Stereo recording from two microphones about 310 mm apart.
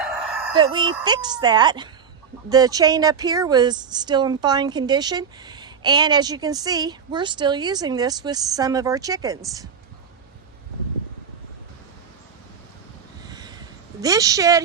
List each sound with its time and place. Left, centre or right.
0.0 s chicken: centre
0.5 s speech: centre
13.2 s a sound: centre
14.0 s speech: centre